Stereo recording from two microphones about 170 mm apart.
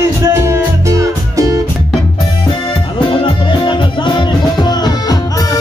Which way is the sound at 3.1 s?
30° left (ahead or behind).